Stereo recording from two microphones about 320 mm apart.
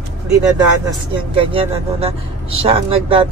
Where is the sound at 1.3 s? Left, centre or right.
Centre.